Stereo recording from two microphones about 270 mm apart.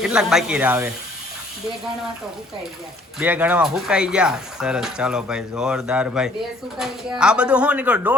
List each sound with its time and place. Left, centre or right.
0.0 s speech: centre
3.2 s speech: centre